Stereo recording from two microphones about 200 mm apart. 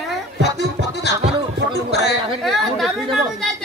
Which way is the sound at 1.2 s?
30° right (ahead or behind).